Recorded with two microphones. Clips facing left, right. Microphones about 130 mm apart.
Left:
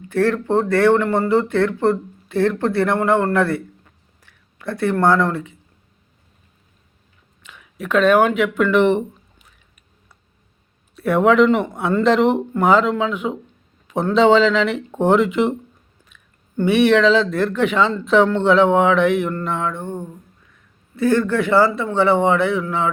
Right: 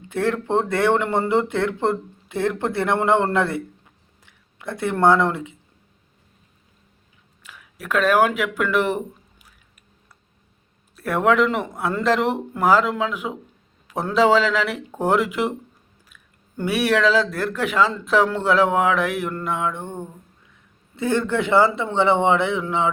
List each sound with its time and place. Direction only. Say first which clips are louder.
0.1 s speech: left 4 dB; 15° right (ahead or behind)
7.4 s speech: left 2 dB; 5° right (ahead or behind)
10.9 s speech: left 4 dB; centre (ahead or behind); by 22.9 s 20° right (ahead or behind)